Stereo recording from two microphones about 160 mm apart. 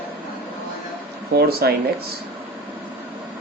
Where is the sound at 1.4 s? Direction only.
75° right (ahead or behind).